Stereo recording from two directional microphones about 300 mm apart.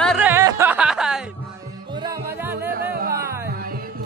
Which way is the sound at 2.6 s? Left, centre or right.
Right.